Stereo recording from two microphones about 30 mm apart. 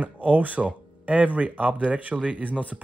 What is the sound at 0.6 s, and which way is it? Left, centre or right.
Speech, right.